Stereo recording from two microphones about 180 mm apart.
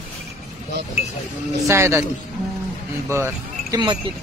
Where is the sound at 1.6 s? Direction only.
15° right (ahead or behind).